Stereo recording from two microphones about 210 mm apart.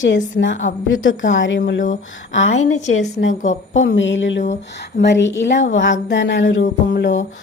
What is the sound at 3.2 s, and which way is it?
A woman's voice, 65° left (ahead or behind).